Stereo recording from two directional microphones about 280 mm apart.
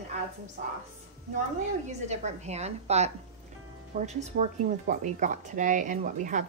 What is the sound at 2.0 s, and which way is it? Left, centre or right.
Speech, right.